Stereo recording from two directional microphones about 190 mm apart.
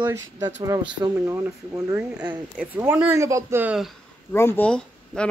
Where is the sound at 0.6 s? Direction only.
20° right (ahead or behind); by 3.9 s 5° right (ahead or behind).